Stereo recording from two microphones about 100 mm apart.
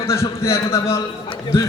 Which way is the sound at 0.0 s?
30° left (ahead or behind).